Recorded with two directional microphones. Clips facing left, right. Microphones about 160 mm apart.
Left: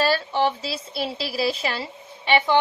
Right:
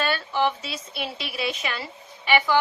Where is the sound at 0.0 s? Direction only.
30° left (ahead or behind).